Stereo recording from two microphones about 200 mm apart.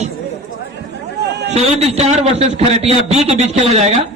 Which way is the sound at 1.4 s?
35° right (ahead or behind).